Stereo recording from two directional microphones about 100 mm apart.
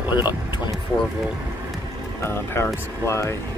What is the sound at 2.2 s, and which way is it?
Speech, 25° left (ahead or behind).